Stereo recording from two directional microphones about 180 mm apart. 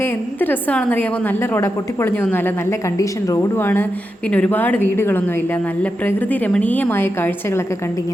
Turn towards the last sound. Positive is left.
turn(degrees=15)  # may be behind; listen again after turning